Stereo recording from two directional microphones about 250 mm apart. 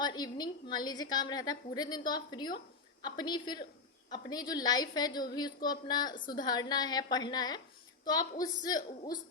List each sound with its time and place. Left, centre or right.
0.0 s a woman's voice: centre